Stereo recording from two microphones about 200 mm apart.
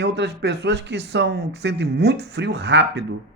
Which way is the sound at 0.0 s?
60° right (ahead or behind).